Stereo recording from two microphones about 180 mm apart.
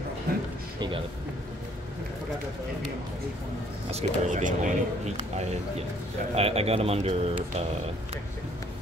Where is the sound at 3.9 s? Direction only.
40° right (ahead or behind).